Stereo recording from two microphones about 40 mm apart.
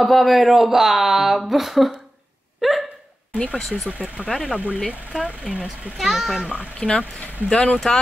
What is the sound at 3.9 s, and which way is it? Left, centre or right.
Speech, right.